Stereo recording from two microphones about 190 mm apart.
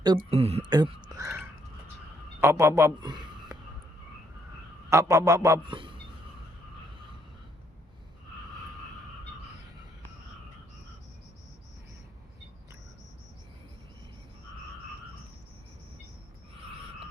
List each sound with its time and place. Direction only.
0.3 s speech: 35° right (ahead or behind)
0.7 s speech: 20° right (ahead or behind)
2.4 s a man's voice: 15° right (ahead or behind)
4.9 s speech: 15° right (ahead or behind)